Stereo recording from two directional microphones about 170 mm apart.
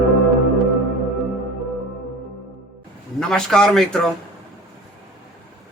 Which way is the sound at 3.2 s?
5° left (ahead or behind).